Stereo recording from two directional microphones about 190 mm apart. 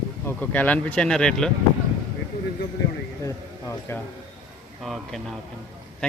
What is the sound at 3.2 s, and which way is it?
Speech, 15° left (ahead or behind).